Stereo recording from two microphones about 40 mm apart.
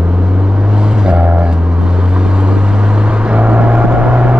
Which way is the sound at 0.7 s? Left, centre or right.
Right.